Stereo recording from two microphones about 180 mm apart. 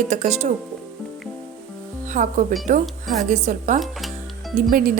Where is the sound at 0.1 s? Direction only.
40° right (ahead or behind).